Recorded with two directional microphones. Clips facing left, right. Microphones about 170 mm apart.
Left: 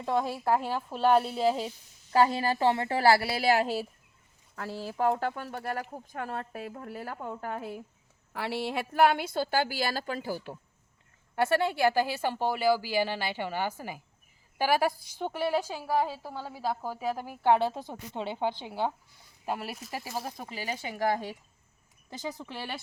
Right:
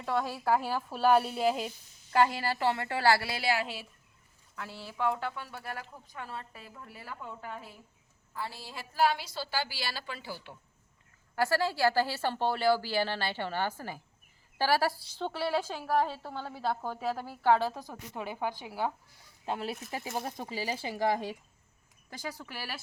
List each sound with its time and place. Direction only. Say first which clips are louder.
0.0 s a woman's voice: left 3 dB; 15° left (ahead or behind)
0.4 s speech: right 1 dB; centre (ahead or behind)
0.7 s a woman's voice: left 1 dB; 20° left (ahead or behind)
1.0 s speech: left 1 dB; 5° right (ahead or behind)
2.2 s a woman's voice: left 5 dB; 20° left (ahead or behind)
3.3 s a woman's voice: left 6 dB; 45° left (ahead or behind)
8.3 s speech: left 9 dB; 80° left; by 10.6 s 40° left (ahead or behind)
11.3 s a woman's voice: left 2 dB; 20° left (ahead or behind)
19.5 s speech: even; 5° left (ahead or behind)
20.4 s speech: right 3 dB; 30° right (ahead or behind)
20.9 s speech: left 1 dB; centre (ahead or behind)
22.2 s a woman's voice: left 3 dB; 20° left (ahead or behind)